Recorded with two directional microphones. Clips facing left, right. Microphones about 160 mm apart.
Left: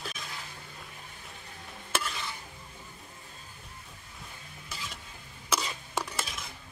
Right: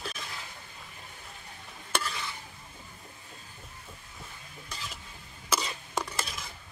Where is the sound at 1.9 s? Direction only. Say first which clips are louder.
Even; centre (ahead or behind).